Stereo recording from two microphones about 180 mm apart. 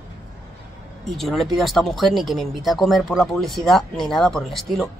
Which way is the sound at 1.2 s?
Centre (ahead or behind).